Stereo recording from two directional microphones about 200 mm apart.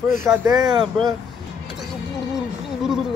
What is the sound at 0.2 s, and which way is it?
Speech, 15° right (ahead or behind).